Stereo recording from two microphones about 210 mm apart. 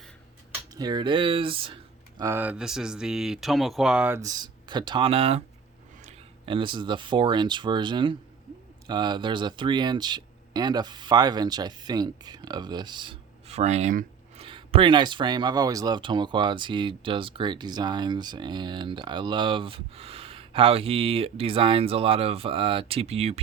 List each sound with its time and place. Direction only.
0.7 s speech: 20° right (ahead or behind)